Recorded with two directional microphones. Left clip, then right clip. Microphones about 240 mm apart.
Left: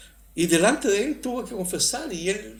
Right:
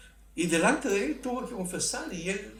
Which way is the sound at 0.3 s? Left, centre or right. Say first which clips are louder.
Left 5 dB; left.